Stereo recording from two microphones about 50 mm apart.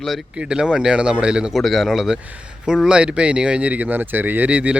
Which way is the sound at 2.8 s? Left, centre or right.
Right.